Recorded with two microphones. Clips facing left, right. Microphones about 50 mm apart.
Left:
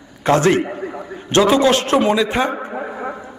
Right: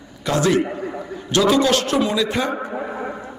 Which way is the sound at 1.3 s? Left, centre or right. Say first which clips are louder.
Left 3 dB; left.